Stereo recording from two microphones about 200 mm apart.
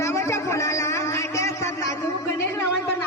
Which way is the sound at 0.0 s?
15° left (ahead or behind).